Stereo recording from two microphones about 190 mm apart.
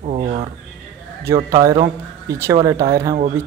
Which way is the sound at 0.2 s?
30° right (ahead or behind).